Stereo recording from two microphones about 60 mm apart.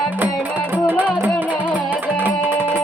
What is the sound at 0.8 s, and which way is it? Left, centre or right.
Music, right.